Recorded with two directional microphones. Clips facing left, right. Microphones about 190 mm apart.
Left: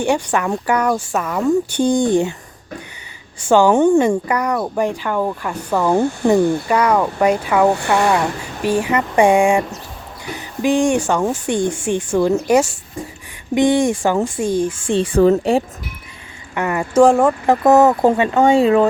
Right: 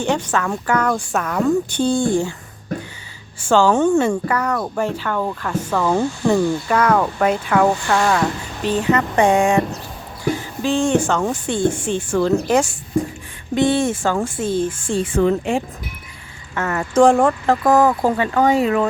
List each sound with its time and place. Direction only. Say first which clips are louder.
0.0 s speech: left 2 dB; 15° left (ahead or behind)
3.5 s speech: left 3 dB; 15° left (ahead or behind)
7.7 s speech: left 2 dB; 60° left (ahead or behind)
8.6 s speech: left 1 dB; 10° left (ahead or behind)
14.9 s speech: left 4 dB; 35° left (ahead or behind)
16.6 s speech: left 2 dB; 15° left (ahead or behind)
17.4 s speech: left 6 dB; 20° left (ahead or behind)